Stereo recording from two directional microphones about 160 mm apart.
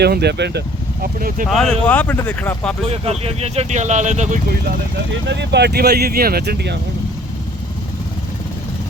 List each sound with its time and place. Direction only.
0.0 s speech: 90° right
1.0 s speech: 65° right (ahead or behind)
1.5 s speech: centre (ahead or behind)
2.8 s speech: 40° right (ahead or behind)
5.3 s speech: 90° right